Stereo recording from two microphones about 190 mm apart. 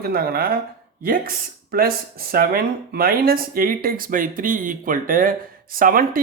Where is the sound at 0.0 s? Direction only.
55° right (ahead or behind).